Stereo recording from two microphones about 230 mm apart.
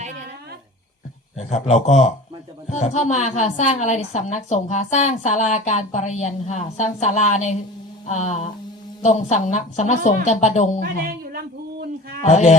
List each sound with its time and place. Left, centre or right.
1.6 s a man's voice: left
10.8 s a sound: right
12.3 s a man's voice: left